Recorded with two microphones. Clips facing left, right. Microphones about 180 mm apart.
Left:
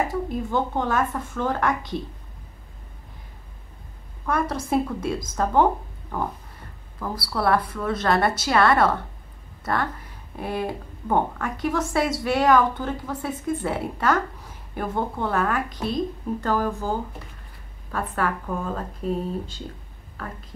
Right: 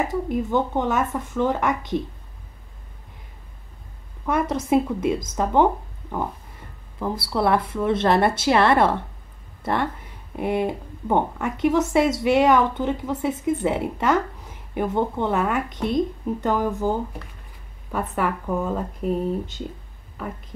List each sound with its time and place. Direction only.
0.1 s speech: 15° right (ahead or behind)
4.3 s a woman's voice: 20° right (ahead or behind)
7.0 s a woman's voice: 25° right (ahead or behind)
9.6 s a sound: 25° right (ahead or behind)
10.3 s a woman's voice: 20° right (ahead or behind)
17.9 s speech: 10° right (ahead or behind)